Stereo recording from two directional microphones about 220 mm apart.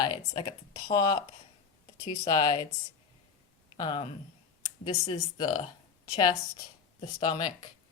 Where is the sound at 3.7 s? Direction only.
20° left (ahead or behind).